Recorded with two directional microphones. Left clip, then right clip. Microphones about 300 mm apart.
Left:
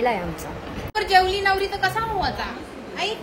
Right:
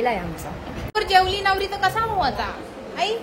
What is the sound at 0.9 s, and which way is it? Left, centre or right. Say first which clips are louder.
A woman's voice: even; centre.